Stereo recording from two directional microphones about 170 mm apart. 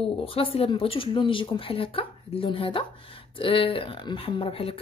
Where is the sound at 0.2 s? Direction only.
35° left (ahead or behind).